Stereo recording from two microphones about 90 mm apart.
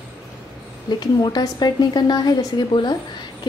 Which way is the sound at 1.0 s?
50° left (ahead or behind).